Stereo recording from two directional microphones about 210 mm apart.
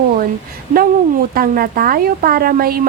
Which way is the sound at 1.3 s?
45° right (ahead or behind).